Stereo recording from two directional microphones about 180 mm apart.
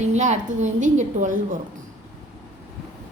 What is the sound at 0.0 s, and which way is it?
A woman's voice, 40° right (ahead or behind).